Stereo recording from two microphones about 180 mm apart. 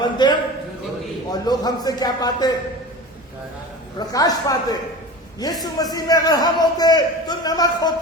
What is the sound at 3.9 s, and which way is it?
A man's voice, 20° left (ahead or behind).